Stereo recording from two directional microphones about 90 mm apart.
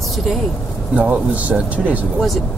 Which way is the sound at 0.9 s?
15° right (ahead or behind).